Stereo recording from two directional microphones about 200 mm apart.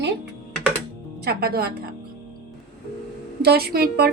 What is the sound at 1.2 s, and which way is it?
Speech, 50° right (ahead or behind).